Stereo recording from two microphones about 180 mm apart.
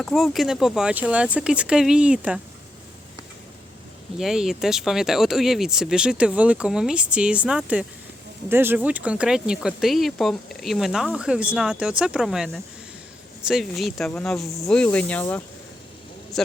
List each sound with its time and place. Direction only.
0.0 s speech: centre (ahead or behind)
4.2 s speech: centre (ahead or behind)